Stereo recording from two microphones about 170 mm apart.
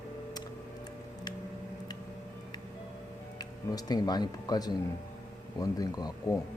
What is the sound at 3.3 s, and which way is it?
Speech, 25° left (ahead or behind).